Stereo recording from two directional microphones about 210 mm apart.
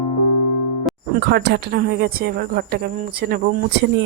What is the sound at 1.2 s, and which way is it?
Speech, 55° right (ahead or behind).